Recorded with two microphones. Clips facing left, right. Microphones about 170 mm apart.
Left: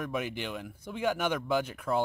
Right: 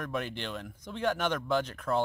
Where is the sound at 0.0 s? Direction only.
5° left (ahead or behind).